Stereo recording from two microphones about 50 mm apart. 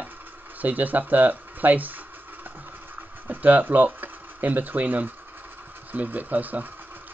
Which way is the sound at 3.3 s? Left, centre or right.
Right.